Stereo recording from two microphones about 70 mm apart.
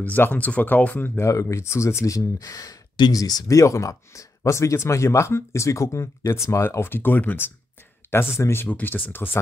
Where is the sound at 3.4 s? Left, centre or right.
Left.